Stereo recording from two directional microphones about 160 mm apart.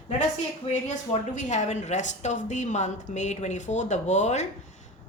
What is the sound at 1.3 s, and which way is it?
A woman's voice, 50° left (ahead or behind).